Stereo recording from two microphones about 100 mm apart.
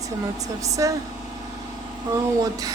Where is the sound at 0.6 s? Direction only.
35° right (ahead or behind).